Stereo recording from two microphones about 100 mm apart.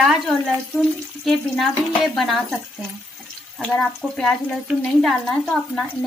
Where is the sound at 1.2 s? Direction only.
Centre (ahead or behind).